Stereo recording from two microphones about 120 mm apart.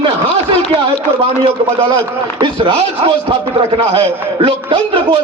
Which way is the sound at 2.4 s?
45° right (ahead or behind).